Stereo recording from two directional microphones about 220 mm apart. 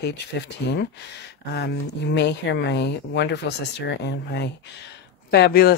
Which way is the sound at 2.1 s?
50° left (ahead or behind).